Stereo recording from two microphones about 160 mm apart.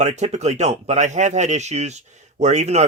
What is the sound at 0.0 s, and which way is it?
Speech, 45° right (ahead or behind).